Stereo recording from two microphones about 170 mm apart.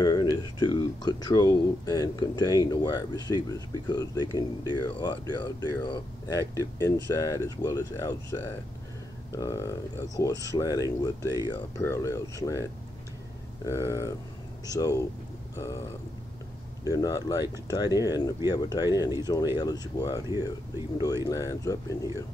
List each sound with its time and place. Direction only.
0.0 s a sound: 20° left (ahead or behind)
0.4 s speech: 25° left (ahead or behind)
13.7 s speech: 20° left (ahead or behind)